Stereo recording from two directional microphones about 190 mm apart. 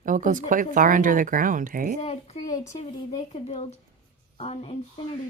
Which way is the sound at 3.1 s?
35° left (ahead or behind).